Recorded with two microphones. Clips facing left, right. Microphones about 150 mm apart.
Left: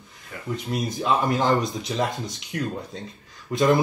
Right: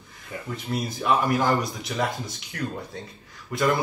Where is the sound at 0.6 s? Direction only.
20° left (ahead or behind).